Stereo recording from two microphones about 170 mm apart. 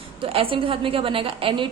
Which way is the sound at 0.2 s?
30° right (ahead or behind).